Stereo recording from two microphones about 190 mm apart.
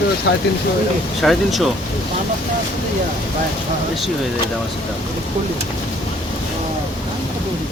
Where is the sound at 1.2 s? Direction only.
Centre (ahead or behind).